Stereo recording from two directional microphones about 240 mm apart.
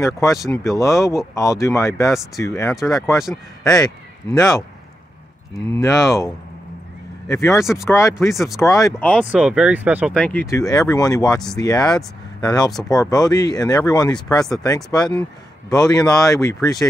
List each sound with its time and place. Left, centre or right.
0.0 s speech: centre
3.7 s speech: centre
5.8 s speech: centre